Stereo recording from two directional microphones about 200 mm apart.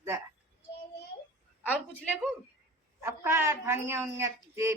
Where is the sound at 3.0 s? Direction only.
15° right (ahead or behind).